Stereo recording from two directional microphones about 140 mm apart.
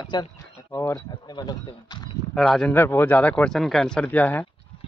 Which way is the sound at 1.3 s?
30° left (ahead or behind).